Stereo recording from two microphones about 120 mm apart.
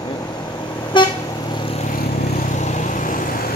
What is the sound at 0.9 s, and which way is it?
Vehicle, 40° left (ahead or behind).